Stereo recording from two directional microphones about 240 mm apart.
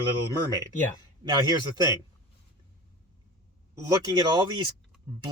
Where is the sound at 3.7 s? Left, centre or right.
Centre.